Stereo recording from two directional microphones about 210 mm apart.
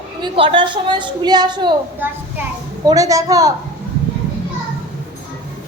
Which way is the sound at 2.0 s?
10° right (ahead or behind).